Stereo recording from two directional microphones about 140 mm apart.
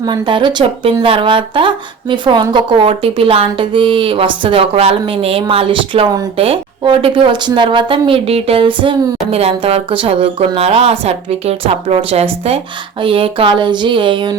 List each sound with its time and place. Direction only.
0.0 s speech: 35° right (ahead or behind)